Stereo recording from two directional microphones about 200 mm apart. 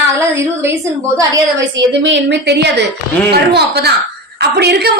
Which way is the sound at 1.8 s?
65° right (ahead or behind).